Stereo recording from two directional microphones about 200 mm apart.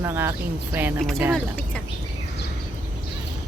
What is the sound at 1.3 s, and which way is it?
Speech, 5° left (ahead or behind).